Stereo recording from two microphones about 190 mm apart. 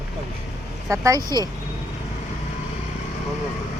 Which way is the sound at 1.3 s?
20° right (ahead or behind).